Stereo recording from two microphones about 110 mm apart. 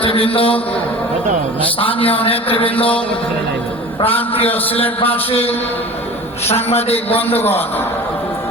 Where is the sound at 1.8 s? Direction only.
55° left (ahead or behind).